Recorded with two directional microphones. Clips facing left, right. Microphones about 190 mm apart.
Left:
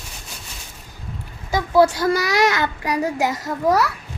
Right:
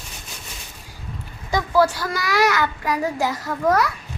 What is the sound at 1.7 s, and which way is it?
A child's voice, 20° left (ahead or behind).